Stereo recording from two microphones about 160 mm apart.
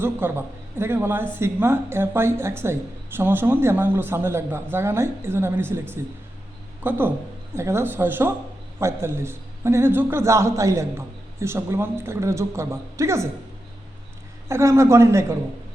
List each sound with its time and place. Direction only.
0.0 s speech: 15° right (ahead or behind)
14.4 s speech: 15° right (ahead or behind)